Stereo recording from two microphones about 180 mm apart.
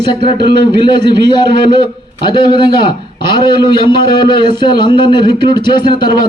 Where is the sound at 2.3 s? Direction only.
25° left (ahead or behind).